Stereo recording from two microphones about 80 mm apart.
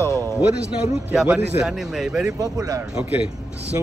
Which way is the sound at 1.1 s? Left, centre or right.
Centre.